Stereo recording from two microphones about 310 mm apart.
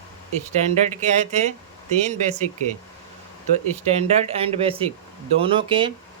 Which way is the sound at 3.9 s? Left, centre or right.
Centre.